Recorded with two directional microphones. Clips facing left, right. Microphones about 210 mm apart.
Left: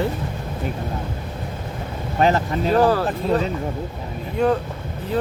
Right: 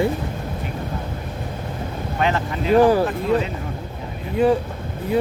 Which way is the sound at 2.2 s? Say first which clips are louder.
Left 4 dB; 40° left (ahead or behind).